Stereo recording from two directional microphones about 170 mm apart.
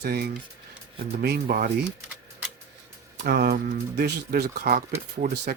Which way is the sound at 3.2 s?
65° right (ahead or behind).